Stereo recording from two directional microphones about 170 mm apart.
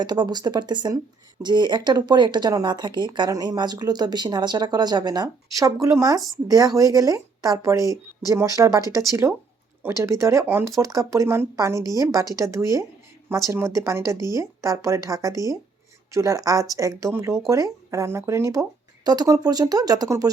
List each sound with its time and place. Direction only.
0.0 s speech: 25° right (ahead or behind)